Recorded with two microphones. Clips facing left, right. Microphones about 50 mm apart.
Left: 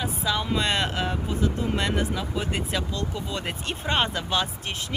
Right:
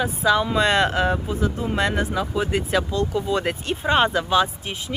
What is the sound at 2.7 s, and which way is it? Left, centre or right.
Speech, right.